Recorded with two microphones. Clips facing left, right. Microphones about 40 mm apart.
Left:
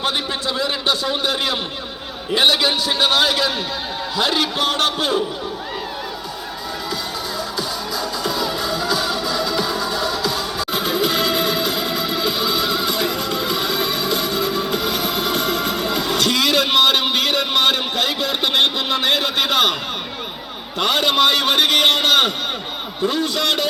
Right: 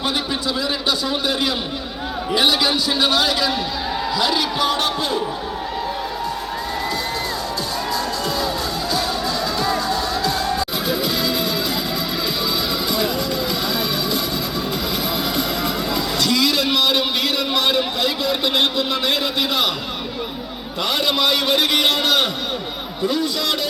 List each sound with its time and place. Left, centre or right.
0.6 s a man's voice: left
10.9 s music: left
11.3 s music: left
15.9 s music: left
16.2 s a sound: left
17.0 s a man's voice: left
20.8 s a man's voice: left